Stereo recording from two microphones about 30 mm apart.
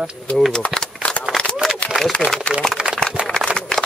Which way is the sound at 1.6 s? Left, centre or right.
Centre.